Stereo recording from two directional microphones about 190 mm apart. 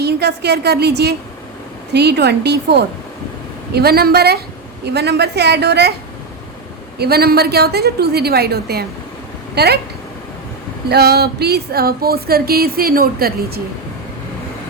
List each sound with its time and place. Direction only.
0.0 s a woman's voice: 60° right (ahead or behind)
7.0 s a woman's voice: 55° right (ahead or behind)
10.8 s speech: 55° right (ahead or behind)